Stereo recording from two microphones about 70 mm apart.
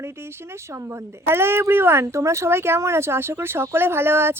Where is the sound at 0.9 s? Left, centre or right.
Right.